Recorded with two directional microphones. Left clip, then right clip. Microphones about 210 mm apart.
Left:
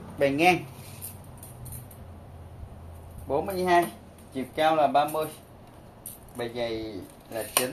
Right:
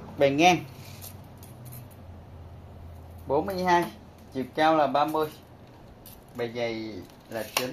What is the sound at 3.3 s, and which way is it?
Speech, 40° right (ahead or behind).